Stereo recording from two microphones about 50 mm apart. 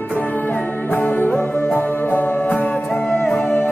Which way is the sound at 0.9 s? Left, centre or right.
Left.